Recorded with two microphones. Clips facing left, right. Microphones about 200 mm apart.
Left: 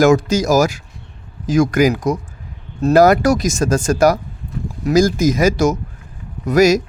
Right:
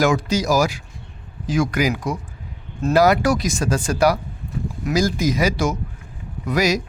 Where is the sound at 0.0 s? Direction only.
45° left (ahead or behind).